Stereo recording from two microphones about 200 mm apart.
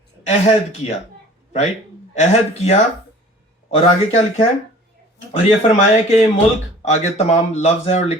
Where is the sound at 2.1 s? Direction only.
35° left (ahead or behind).